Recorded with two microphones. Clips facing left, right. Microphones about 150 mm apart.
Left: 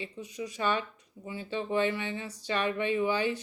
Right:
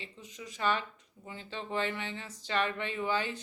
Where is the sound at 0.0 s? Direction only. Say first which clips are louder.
Left 8 dB; 15° left (ahead or behind).